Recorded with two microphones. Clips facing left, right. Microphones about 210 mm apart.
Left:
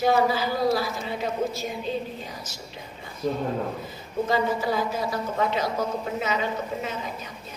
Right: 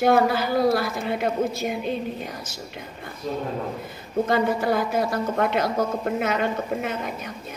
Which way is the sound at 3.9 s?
55° right (ahead or behind).